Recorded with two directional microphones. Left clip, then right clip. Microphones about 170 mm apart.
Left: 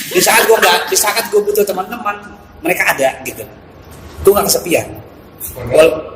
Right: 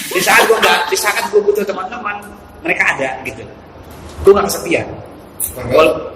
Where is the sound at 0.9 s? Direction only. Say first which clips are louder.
Left 2 dB; 45° left (ahead or behind).